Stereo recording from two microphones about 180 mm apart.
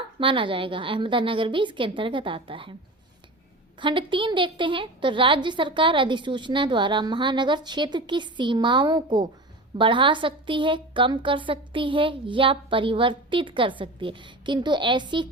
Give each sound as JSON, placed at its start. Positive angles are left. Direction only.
{"t": 0.2, "sound": "a woman's voice", "side_deg": -30}
{"t": 3.8, "sound": "a woman's voice", "side_deg": -25}